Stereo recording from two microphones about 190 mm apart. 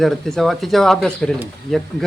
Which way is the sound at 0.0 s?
Centre (ahead or behind).